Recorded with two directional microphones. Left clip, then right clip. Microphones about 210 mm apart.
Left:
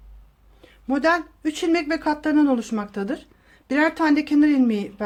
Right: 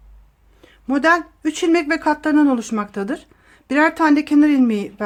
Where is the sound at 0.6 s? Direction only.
15° right (ahead or behind).